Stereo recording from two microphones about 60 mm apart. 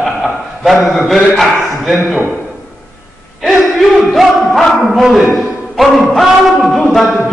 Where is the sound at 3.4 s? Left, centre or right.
Centre.